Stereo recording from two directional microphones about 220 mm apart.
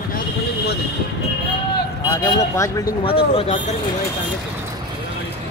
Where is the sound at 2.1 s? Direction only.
15° left (ahead or behind).